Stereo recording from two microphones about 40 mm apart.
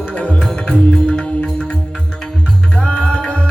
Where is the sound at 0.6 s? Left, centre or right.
Left.